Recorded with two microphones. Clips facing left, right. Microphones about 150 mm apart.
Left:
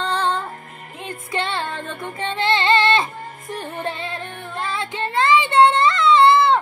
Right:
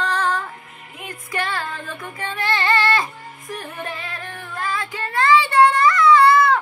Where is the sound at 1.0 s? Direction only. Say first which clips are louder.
Left 1 dB; 25° left (ahead or behind).